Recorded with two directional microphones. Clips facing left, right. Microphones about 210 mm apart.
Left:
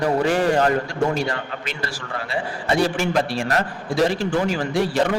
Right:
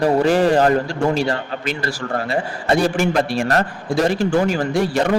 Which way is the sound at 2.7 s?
45° right (ahead or behind).